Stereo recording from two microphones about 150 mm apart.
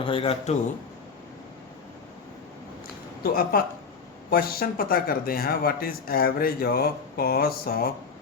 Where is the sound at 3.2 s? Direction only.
80° left.